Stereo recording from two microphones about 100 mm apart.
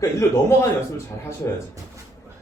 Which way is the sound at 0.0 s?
30° left (ahead or behind).